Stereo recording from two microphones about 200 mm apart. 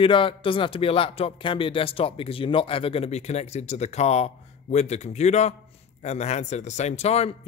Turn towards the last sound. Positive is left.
turn(degrees=30)  # may be behind; listen again after turning